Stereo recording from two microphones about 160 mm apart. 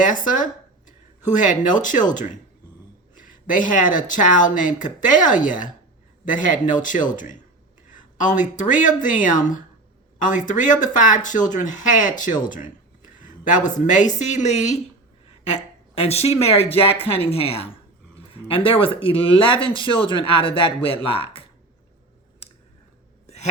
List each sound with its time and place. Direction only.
0.0 s speech: 55° left (ahead or behind)
6.2 s speech: 55° left (ahead or behind)
13.0 s a sound: 55° left (ahead or behind)
14.2 s speech: 50° left (ahead or behind)
16.0 s speech: 40° left (ahead or behind)
23.2 s a sound: 45° left (ahead or behind)